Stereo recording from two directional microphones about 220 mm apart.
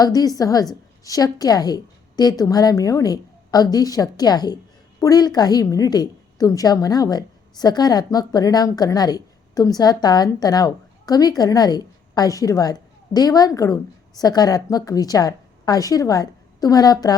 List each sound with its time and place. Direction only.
0.0 s a woman's voice: 15° left (ahead or behind)